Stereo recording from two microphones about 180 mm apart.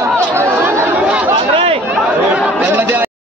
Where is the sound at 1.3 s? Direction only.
35° right (ahead or behind).